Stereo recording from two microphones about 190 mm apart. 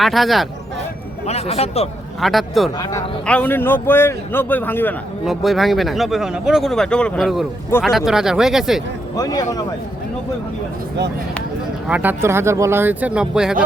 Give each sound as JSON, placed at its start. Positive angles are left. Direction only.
{"t": 0.0, "sound": "speech", "side_deg": 0}
{"t": 1.3, "sound": "a man's voice", "side_deg": 30}
{"t": 2.2, "sound": "a man's voice", "side_deg": 0}
{"t": 5.2, "sound": "speech", "side_deg": 0}
{"t": 9.1, "sound": "a man's voice", "side_deg": 20}
{"t": 11.9, "sound": "speech", "side_deg": -10}